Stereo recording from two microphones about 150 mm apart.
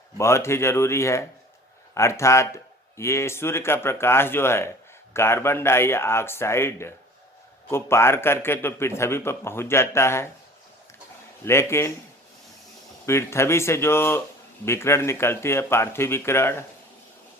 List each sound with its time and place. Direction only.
0.2 s a man's voice: 20° left (ahead or behind)
11.4 s a man's voice: 15° left (ahead or behind)
13.1 s a man's voice: 20° left (ahead or behind)